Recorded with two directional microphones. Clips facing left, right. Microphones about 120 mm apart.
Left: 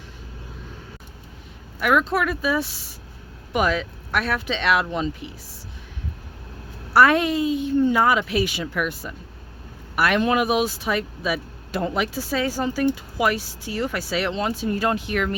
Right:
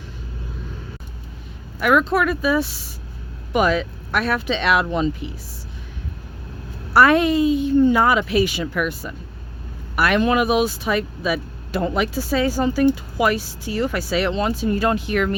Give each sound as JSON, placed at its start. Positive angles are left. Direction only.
{"t": 1.8, "sound": "speech", "side_deg": -35}
{"t": 3.5, "sound": "speech", "side_deg": -25}
{"t": 6.9, "sound": "speech", "side_deg": -35}
{"t": 8.6, "sound": "speech", "side_deg": -75}
{"t": 9.9, "sound": "speech", "side_deg": -60}
{"t": 12.3, "sound": "speech", "side_deg": -25}